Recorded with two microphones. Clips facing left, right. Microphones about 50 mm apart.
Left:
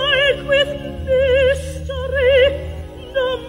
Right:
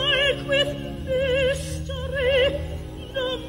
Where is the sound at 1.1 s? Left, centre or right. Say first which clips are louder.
Left 8 dB; left.